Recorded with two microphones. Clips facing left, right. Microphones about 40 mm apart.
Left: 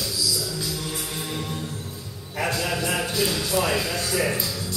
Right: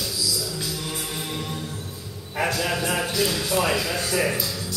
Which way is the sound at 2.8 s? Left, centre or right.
Centre.